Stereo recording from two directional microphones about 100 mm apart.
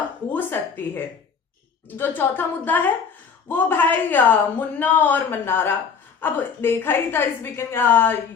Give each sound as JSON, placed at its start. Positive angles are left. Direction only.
{"t": 0.3, "sound": "speech", "side_deg": 20}